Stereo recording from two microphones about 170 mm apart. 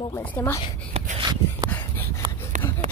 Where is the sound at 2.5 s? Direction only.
50° right (ahead or behind).